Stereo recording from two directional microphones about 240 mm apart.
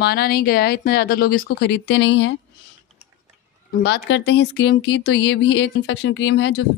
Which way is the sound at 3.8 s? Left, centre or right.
Left.